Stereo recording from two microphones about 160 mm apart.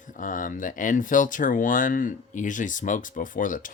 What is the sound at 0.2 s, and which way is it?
Speech, 55° left (ahead or behind).